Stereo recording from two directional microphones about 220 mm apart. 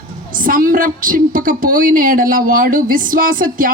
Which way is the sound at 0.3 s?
40° right (ahead or behind).